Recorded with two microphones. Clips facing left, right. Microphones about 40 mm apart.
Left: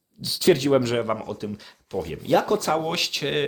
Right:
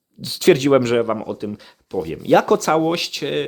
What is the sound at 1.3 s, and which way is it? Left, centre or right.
Speech, centre.